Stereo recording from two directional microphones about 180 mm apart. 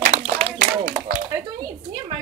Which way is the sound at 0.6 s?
50° right (ahead or behind).